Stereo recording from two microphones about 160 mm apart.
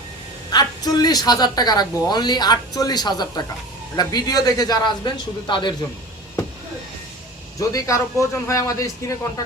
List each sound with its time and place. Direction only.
0.5 s a woman's voice: 25° left (ahead or behind)
7.6 s a woman's voice: 20° left (ahead or behind)